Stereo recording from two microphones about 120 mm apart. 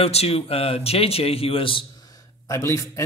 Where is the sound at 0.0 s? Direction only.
55° left (ahead or behind).